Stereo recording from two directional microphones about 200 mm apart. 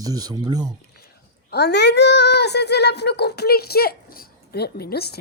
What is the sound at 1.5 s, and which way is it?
A child's voice, 55° left (ahead or behind).